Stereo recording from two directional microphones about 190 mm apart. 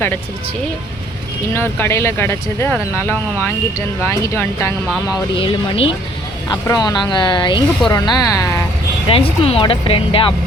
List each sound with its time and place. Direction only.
1.5 s speech: 10° left (ahead or behind)
5.4 s speech: 25° left (ahead or behind)
9.0 s speech: 30° left (ahead or behind)